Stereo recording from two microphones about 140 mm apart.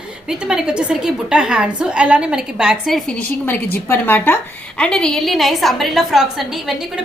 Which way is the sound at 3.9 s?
15° left (ahead or behind).